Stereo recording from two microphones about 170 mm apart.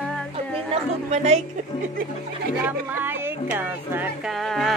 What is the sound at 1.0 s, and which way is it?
Speech, 40° right (ahead or behind).